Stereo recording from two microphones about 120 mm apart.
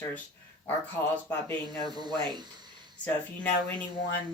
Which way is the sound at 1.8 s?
35° right (ahead or behind).